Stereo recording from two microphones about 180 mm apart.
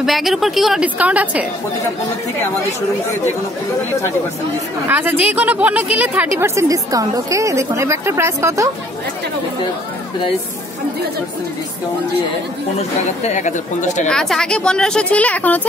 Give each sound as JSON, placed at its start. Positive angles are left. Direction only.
{"t": 0.0, "sound": "speech", "side_deg": 0}
{"t": 4.8, "sound": "a woman's voice", "side_deg": -10}
{"t": 12.7, "sound": "speech", "side_deg": 40}
{"t": 14.0, "sound": "speech", "side_deg": 5}